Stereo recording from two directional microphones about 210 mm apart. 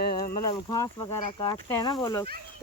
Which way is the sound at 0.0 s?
45° left (ahead or behind).